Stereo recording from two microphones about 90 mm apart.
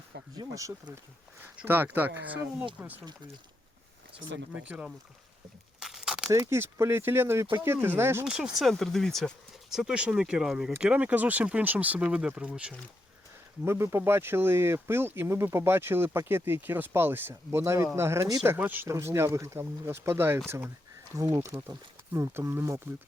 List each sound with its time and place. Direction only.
0.3 s speech: 40° right (ahead or behind)
1.6 s speech: 20° right (ahead or behind)
4.2 s speech: 15° right (ahead or behind)
5.8 s crumpling: 5° right (ahead or behind)
6.3 s speech: 40° right (ahead or behind)
8.2 s speech: 10° right (ahead or behind)
8.5 s speech: 5° left (ahead or behind)
9.6 s speech: 5° right (ahead or behind)
13.7 s speech: 30° right (ahead or behind)